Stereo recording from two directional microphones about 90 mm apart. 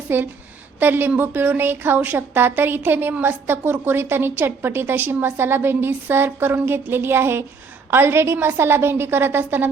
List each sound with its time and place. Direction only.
0.1 s a woman's voice: 20° right (ahead or behind)